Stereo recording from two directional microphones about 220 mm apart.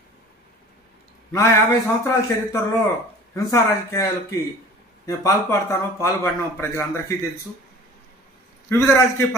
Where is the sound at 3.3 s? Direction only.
15° left (ahead or behind).